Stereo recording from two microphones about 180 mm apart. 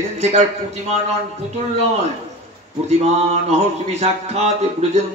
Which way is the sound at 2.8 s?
35° right (ahead or behind).